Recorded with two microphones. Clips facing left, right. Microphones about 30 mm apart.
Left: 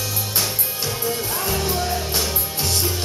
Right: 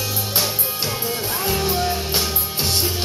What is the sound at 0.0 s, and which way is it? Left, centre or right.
Music, centre.